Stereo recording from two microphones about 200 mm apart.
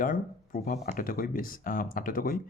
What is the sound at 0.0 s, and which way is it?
Speech, 45° left (ahead or behind).